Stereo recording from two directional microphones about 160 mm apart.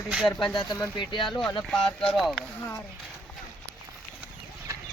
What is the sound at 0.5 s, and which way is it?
Speech, 25° left (ahead or behind).